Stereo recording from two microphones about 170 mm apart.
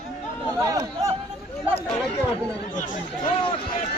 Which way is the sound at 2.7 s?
50° left (ahead or behind).